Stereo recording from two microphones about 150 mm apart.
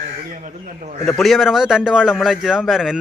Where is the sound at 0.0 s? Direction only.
60° right (ahead or behind).